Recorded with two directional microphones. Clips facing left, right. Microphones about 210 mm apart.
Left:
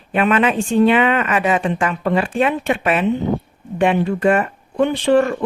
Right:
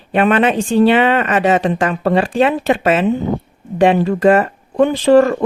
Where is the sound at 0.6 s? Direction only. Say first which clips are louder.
Right 2 dB; 90° right.